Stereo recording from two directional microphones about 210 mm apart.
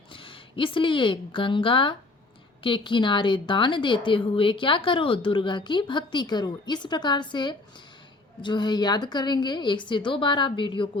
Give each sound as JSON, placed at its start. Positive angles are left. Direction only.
{"t": 0.1, "sound": "a woman's voice", "side_deg": 25}